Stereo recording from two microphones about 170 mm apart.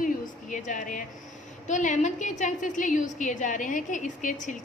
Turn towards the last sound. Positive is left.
turn(degrees=50)  # may be behind; listen again after turning